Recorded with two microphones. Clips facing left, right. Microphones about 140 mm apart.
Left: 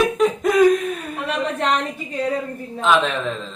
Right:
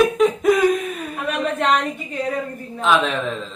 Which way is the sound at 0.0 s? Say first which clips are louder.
Right 2 dB; centre (ahead or behind).